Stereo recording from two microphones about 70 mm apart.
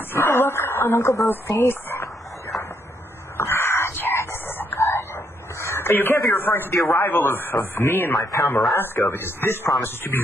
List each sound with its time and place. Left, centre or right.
0.1 s radio: left
3.3 s a sound: left
4.7 s speech: left
8.2 s speech: left
8.5 s speech: left